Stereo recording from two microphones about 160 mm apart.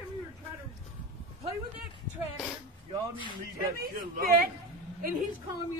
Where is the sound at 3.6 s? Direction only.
60° right (ahead or behind).